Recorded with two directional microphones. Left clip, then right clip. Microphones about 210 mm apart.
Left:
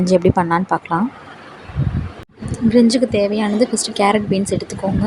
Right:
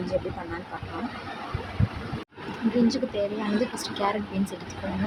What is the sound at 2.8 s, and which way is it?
Speech, 30° left (ahead or behind).